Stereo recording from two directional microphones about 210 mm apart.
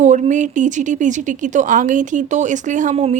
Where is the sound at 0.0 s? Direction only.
35° right (ahead or behind).